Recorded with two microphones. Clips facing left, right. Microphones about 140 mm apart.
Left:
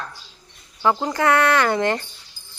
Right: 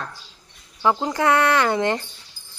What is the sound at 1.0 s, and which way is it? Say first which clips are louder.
Speech: left 1 dB; 20° right (ahead or behind).